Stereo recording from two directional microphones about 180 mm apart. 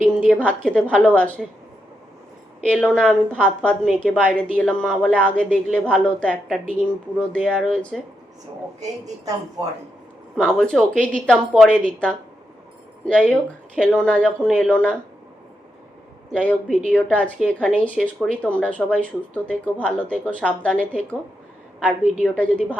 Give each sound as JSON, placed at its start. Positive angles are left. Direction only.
{"t": 0.0, "sound": "a woman's voice", "side_deg": 5}
{"t": 2.6, "sound": "a woman's voice", "side_deg": 5}
{"t": 10.3, "sound": "a woman's voice", "side_deg": 0}
{"t": 16.3, "sound": "a woman's voice", "side_deg": 5}
{"t": 22.2, "sound": "a woman's voice", "side_deg": 5}